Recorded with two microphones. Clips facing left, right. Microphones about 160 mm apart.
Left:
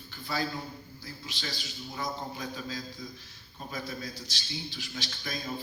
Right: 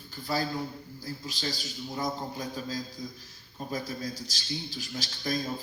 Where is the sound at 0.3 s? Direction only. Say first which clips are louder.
Right 3 dB; 40° right (ahead or behind).